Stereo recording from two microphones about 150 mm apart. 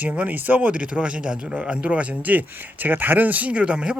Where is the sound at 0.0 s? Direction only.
10° right (ahead or behind).